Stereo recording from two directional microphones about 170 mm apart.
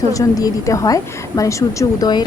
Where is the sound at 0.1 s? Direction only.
20° left (ahead or behind).